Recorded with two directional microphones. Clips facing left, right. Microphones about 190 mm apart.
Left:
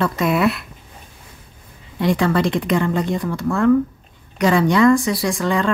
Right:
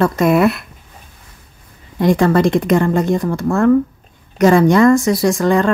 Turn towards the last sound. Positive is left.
turn(degrees=-45)  # may be behind; listen again after turning